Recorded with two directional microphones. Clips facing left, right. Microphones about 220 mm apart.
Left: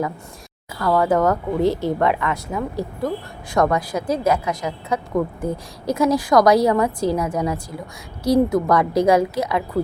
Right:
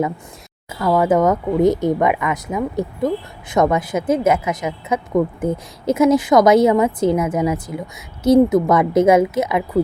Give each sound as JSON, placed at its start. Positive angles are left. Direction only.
{"t": 0.8, "sound": "a woman's voice", "side_deg": -20}